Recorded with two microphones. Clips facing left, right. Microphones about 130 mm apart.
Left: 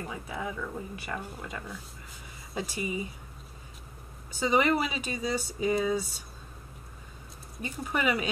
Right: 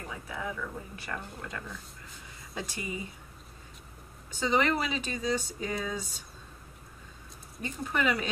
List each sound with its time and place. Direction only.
0.1 s speech: 15° left (ahead or behind)
4.4 s speech: 10° left (ahead or behind)
7.6 s speech: 10° left (ahead or behind)